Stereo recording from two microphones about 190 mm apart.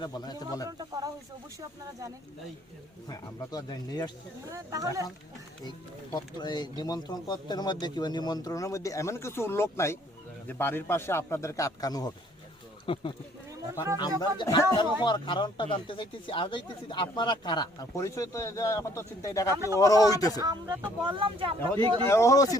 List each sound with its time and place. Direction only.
0.0 s speech: 20° left (ahead or behind)
0.8 s speech: 20° right (ahead or behind)
3.1 s speech: 20° left (ahead or behind)
4.5 s speech: 15° right (ahead or behind)
6.1 s speech: 20° left (ahead or behind)
14.2 s speech: 20° left (ahead or behind)
20.4 s speech: 20° right (ahead or behind)
22.0 s speech: 15° left (ahead or behind)